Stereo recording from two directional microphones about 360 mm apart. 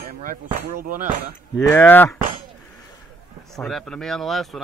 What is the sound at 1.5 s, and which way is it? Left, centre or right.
Speech, centre.